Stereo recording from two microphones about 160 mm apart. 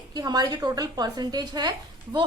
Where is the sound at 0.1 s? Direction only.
25° right (ahead or behind).